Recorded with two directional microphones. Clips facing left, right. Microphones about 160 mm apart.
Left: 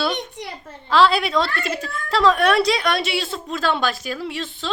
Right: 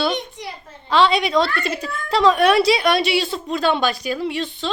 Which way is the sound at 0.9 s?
Centre (ahead or behind).